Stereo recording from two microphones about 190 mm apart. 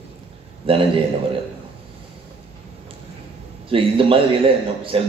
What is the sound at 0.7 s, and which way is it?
Speech, 30° right (ahead or behind).